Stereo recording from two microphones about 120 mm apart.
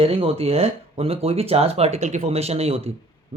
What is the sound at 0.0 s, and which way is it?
Speech, 55° right (ahead or behind).